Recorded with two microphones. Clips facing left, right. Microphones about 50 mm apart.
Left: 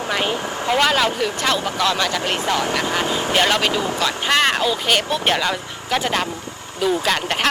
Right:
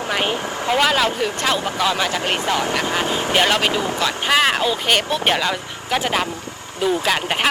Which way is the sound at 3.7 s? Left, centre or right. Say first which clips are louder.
Even; right.